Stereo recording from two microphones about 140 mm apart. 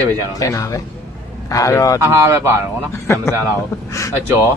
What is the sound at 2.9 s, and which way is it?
A man's voice, 20° left (ahead or behind).